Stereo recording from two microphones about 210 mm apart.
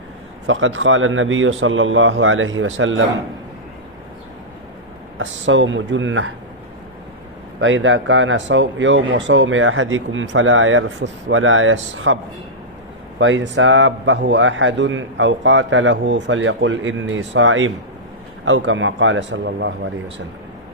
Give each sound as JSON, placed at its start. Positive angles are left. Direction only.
{"t": 0.4, "sound": "a man's voice", "side_deg": -65}
{"t": 5.1, "sound": "speech", "side_deg": -60}
{"t": 7.6, "sound": "speech", "side_deg": -65}
{"t": 13.1, "sound": "speech", "side_deg": -60}